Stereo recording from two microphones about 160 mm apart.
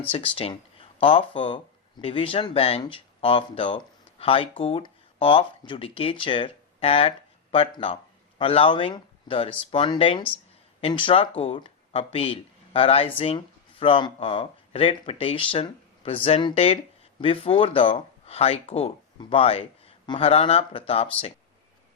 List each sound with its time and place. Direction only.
0.1 s speech: 35° left (ahead or behind)